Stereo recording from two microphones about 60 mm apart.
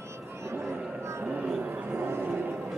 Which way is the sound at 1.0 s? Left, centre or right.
Right.